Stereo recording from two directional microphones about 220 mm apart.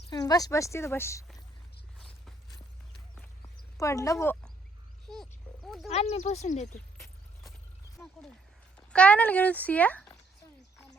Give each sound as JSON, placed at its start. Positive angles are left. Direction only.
{"t": 0.1, "sound": "speech", "side_deg": 15}
{"t": 3.8, "sound": "speech", "side_deg": 15}
{"t": 5.0, "sound": "a sound", "side_deg": 0}
{"t": 5.9, "sound": "speech", "side_deg": 30}
{"t": 7.9, "sound": "speech", "side_deg": 0}